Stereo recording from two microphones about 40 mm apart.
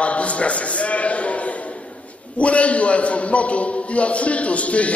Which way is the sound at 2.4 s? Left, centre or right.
Left.